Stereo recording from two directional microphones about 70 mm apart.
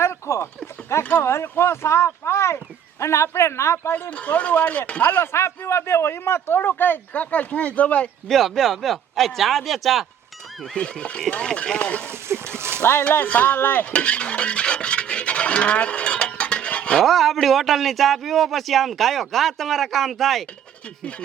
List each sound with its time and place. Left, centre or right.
0.0 s a sound: left
1.1 s a man's voice: left
4.1 s speech: centre
5.0 s a man's voice: left
8.3 s a man's voice: centre
10.6 s speech: centre
12.0 s a sound: right
12.8 s speech: left
13.9 s filing: centre
17.0 s a man's voice: centre